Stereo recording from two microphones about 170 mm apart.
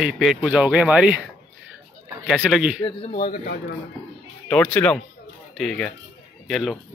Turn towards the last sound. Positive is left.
turn(degrees=0)  # may be behind; listen again after turning